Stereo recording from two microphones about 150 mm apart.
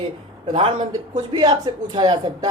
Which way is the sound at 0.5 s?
35° right (ahead or behind).